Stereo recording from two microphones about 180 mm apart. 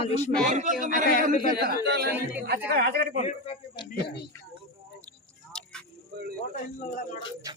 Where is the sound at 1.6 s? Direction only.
55° right (ahead or behind).